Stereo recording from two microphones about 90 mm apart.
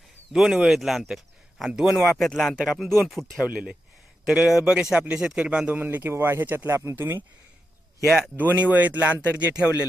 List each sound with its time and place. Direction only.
0.3 s speech: 5° right (ahead or behind)
2.0 s speech: 5° left (ahead or behind); by 6.7 s 20° right (ahead or behind)
6.7 s speech: 30° right (ahead or behind)
8.0 s speech: 5° right (ahead or behind)
8.5 s speech: 20° right (ahead or behind)